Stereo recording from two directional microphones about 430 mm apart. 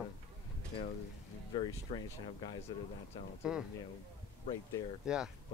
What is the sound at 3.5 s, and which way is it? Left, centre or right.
Speech, centre.